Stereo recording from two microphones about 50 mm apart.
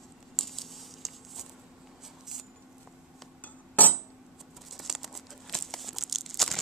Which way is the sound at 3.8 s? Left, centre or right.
Left.